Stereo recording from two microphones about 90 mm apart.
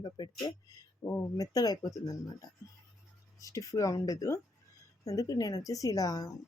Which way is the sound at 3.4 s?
40° left (ahead or behind).